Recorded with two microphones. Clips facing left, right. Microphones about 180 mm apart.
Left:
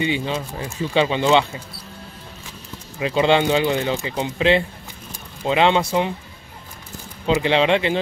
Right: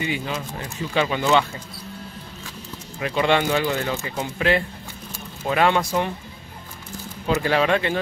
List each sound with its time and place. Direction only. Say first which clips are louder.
0.0 s speech: left 4 dB; 25° left (ahead or behind)
3.0 s speech: left 3 dB; 25° left (ahead or behind)
7.3 s speech: left 2 dB; 20° left (ahead or behind)